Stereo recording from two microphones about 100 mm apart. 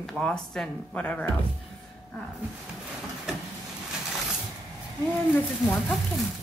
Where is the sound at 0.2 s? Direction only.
10° left (ahead or behind).